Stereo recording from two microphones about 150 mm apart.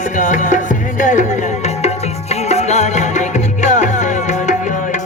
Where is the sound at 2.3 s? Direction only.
45° left (ahead or behind).